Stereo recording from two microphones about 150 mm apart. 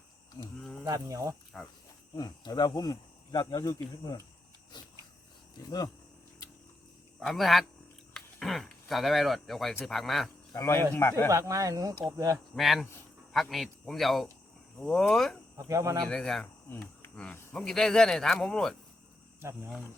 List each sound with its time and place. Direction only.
0.9 s speech: 20° right (ahead or behind)
2.1 s speech: 25° left (ahead or behind)
7.2 s speech: centre (ahead or behind)
10.5 s speech: 20° left (ahead or behind)
11.3 s speech: 20° right (ahead or behind)
12.5 s speech: centre (ahead or behind)
15.5 s speech: 20° right (ahead or behind)
16.0 s speech: 5° left (ahead or behind)
16.6 s speech: 15° left (ahead or behind)